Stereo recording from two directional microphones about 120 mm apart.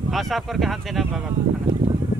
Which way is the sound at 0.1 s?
Centre (ahead or behind).